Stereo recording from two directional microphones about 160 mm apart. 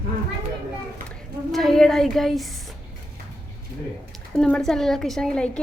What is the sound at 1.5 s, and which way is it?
A woman's voice, centre (ahead or behind).